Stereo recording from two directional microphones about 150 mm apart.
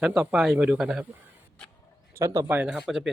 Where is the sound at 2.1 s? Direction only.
20° right (ahead or behind).